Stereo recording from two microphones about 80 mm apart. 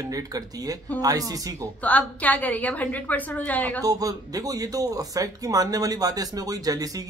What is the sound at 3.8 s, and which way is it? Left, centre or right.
Speech, right.